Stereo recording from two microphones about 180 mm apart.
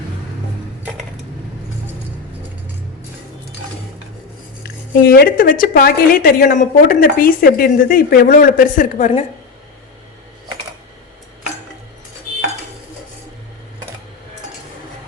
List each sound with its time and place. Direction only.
4.6 s a woman's voice: 60° left (ahead or behind); by 9.2 s 45° left (ahead or behind)